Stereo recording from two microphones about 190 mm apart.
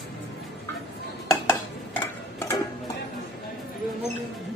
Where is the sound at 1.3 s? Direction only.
15° left (ahead or behind).